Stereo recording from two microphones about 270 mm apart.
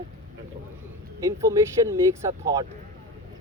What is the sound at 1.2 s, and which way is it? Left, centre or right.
Speech, centre.